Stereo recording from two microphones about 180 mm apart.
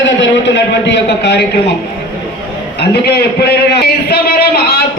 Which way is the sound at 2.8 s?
70° left (ahead or behind).